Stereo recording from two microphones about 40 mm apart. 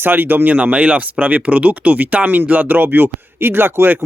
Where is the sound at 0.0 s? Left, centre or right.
Right.